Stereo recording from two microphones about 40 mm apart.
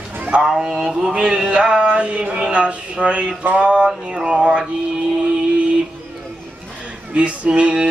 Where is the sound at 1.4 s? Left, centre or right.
Right.